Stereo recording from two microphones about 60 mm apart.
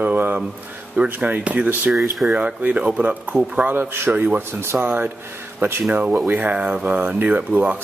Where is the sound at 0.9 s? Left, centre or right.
Right.